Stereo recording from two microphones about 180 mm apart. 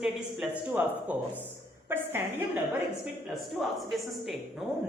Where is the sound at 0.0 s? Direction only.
5° right (ahead or behind).